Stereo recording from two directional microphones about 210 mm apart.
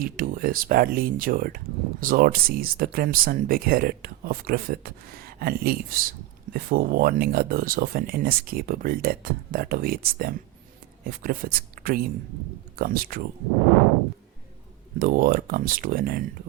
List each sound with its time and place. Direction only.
0.0 s speech: 40° right (ahead or behind)
14.9 s speech: 45° right (ahead or behind)